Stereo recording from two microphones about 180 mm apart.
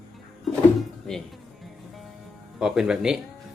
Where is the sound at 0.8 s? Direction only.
5° left (ahead or behind).